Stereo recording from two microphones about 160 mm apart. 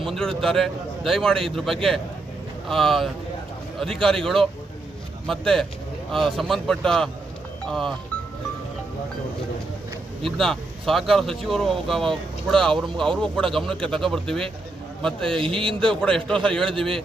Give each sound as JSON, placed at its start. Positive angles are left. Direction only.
{"t": 0.0, "sound": "speech", "side_deg": 0}
{"t": 10.2, "sound": "speech", "side_deg": 0}